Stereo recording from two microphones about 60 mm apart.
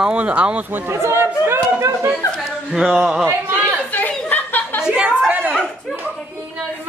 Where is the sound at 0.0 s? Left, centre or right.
Centre.